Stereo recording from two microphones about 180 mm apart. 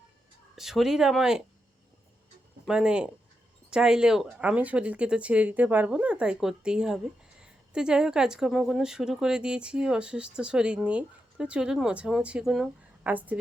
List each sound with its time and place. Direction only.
0.5 s speech: centre (ahead or behind)
2.6 s speech: 5° right (ahead or behind)